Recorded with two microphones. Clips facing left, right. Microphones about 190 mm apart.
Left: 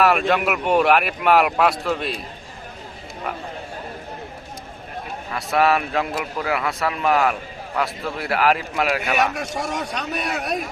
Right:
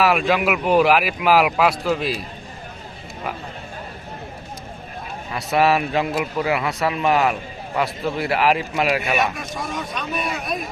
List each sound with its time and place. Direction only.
0.0 s speech: centre (ahead or behind)
5.3 s speech: centre (ahead or behind)
9.2 s a man's voice: 80° left